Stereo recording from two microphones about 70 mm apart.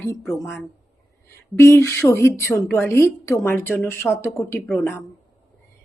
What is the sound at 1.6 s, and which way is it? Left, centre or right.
A woman's voice, left.